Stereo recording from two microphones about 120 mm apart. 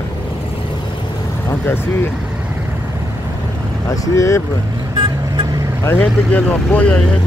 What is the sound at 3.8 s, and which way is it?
Speech, 25° left (ahead or behind).